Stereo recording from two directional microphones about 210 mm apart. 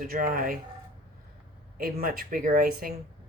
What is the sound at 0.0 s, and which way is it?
Speech, 40° right (ahead or behind).